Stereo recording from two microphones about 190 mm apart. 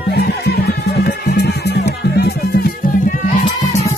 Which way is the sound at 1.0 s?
55° left (ahead or behind).